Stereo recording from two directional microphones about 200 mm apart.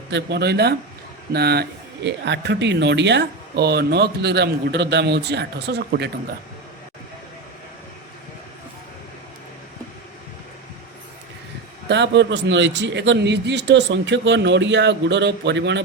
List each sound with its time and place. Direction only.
0.1 s speech: 55° right (ahead or behind)
11.9 s speech: 60° right (ahead or behind)